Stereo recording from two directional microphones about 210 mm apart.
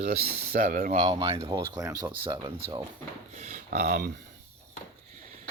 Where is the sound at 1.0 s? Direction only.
20° right (ahead or behind).